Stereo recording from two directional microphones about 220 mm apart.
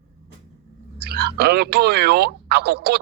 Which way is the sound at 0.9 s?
50° right (ahead or behind).